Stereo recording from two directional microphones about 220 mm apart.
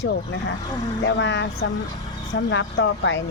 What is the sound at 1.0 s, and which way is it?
Speech, 55° left (ahead or behind).